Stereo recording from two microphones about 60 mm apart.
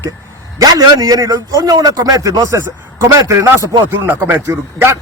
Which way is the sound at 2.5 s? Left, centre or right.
Right.